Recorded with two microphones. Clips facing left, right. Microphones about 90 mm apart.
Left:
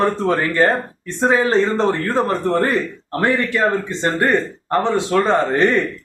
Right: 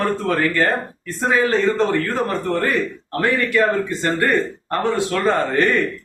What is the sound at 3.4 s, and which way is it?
A man's voice, 25° left (ahead or behind).